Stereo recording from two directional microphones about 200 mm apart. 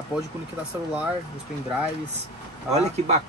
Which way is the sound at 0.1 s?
5° right (ahead or behind).